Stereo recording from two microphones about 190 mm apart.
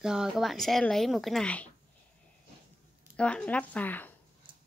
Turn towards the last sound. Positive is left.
turn(degrees=10)  # may be behind; listen again after turning